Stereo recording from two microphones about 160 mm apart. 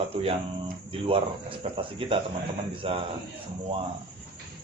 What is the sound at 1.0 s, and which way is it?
A man's voice, 35° right (ahead or behind).